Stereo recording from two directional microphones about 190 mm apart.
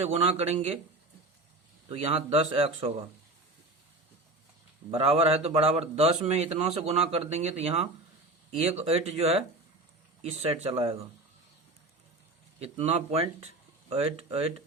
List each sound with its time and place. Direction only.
0.0 s a man's voice: 30° right (ahead or behind)
1.9 s a man's voice: 30° right (ahead or behind)
4.9 s a man's voice: 30° right (ahead or behind)
12.5 s a man's voice: 35° right (ahead or behind)